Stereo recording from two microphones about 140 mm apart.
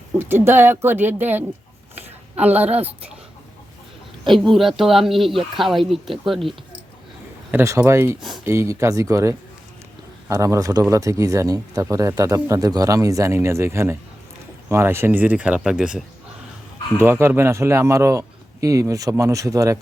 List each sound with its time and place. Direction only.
0.2 s speech: 15° right (ahead or behind)
2.0 s a sound: 10° right (ahead or behind)
2.8 s speech: 10° right (ahead or behind)
4.3 s speech: centre (ahead or behind)
7.5 s speech: 15° right (ahead or behind)
17.0 s speech: 15° right (ahead or behind)